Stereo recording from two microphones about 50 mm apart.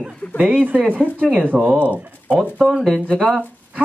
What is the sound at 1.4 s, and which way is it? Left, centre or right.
Speech, right.